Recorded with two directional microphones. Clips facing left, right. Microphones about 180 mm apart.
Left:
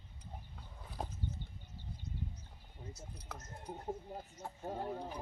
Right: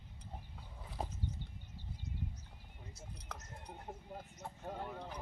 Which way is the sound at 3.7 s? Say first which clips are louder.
Left 6 dB; 35° left (ahead or behind).